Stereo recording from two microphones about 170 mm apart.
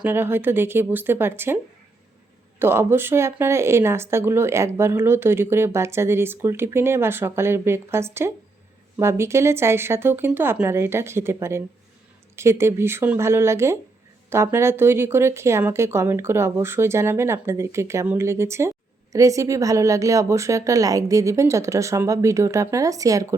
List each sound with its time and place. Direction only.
0.0 s speech: 15° right (ahead or behind)
2.6 s speech: 15° right (ahead or behind)